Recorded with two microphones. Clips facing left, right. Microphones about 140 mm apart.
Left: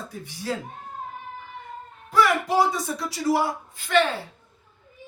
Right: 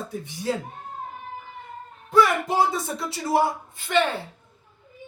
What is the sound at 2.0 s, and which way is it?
A man's voice, 25° right (ahead or behind).